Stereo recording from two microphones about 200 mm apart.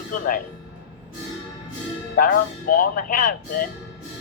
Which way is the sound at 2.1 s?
45° left (ahead or behind).